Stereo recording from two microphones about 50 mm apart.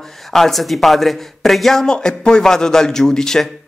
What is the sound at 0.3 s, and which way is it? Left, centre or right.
A man's voice, centre.